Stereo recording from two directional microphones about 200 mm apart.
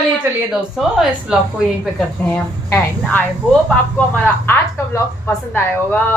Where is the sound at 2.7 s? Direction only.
10° left (ahead or behind).